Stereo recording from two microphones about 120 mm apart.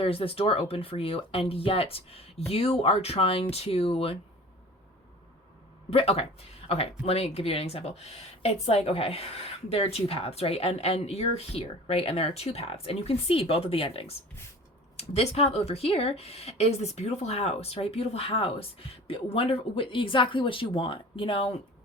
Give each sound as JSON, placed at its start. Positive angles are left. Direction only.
{"t": 0.0, "sound": "speech", "side_deg": 50}
{"t": 5.9, "sound": "speech", "side_deg": 55}